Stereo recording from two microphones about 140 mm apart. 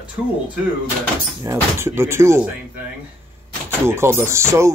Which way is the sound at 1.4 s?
20° right (ahead or behind).